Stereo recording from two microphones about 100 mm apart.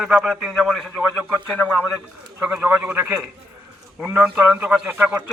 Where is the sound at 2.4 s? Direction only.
20° right (ahead or behind).